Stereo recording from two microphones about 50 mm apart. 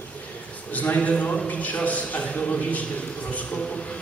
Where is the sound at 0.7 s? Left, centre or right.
Left.